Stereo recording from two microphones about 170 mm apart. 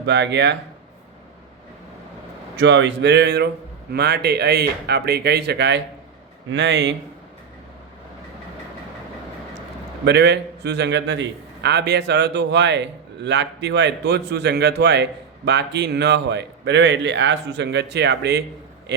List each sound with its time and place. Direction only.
0.0 s a man's voice: 90° right
2.6 s a man's voice: 90° right
10.1 s a man's voice: 80° right
18.9 s speech: 90° right